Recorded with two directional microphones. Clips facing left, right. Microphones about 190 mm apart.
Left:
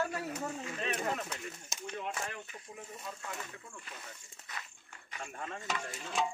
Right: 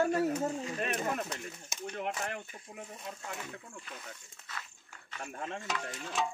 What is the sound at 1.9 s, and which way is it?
Speech, 65° right (ahead or behind).